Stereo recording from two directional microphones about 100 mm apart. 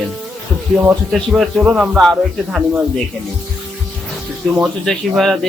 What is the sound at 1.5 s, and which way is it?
Speech, 15° right (ahead or behind).